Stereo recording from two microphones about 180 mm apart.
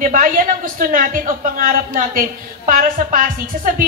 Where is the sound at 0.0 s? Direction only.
45° right (ahead or behind).